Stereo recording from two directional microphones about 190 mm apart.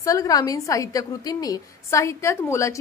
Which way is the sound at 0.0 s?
20° left (ahead or behind).